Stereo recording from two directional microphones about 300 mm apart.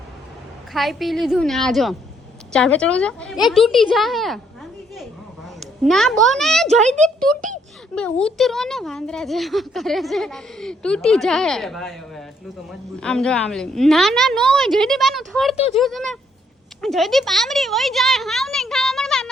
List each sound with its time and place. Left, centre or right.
0.7 s a woman's voice: centre
5.8 s a woman's voice: centre
6.8 s a child's voice: right
8.2 s a woman's voice: centre